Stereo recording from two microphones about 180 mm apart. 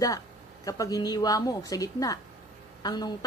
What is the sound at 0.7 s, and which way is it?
A woman's voice, 20° left (ahead or behind).